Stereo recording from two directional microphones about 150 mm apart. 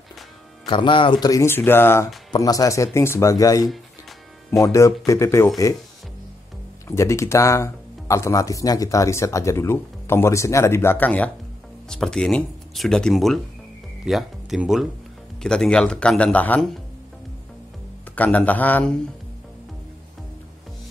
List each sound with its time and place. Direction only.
0.7 s speech: 35° left (ahead or behind)
7.0 s speech: 20° left (ahead or behind)
18.1 s speech: 10° left (ahead or behind)